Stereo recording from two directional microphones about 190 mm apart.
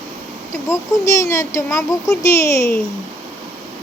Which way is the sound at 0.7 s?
15° left (ahead or behind).